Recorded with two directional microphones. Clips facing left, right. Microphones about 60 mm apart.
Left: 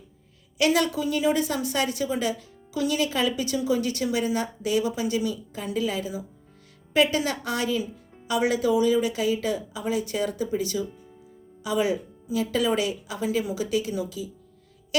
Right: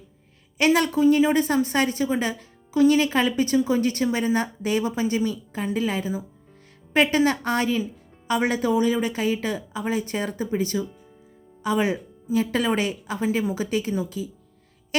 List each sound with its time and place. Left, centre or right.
0.6 s a woman's voice: right